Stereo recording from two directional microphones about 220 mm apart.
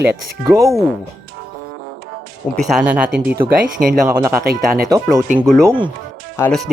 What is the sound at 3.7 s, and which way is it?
Speech, 35° right (ahead or behind).